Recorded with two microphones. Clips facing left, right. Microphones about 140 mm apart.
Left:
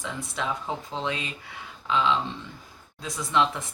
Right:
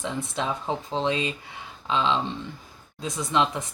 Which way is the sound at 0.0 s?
20° right (ahead or behind).